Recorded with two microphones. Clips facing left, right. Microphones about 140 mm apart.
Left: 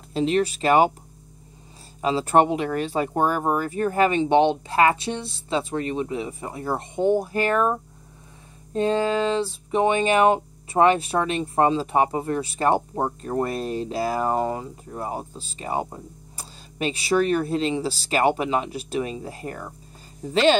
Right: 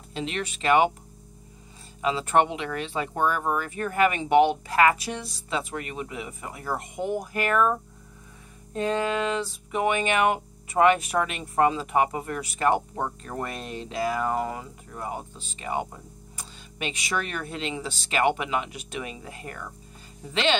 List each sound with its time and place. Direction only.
0.1 s speech: 35° left (ahead or behind)
2.0 s speech: 35° left (ahead or behind)